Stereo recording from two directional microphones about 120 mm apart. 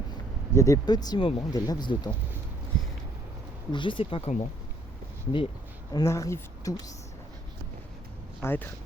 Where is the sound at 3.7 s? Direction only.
45° left (ahead or behind).